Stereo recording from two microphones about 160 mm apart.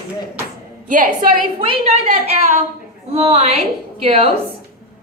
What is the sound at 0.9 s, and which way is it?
Speech, 55° right (ahead or behind).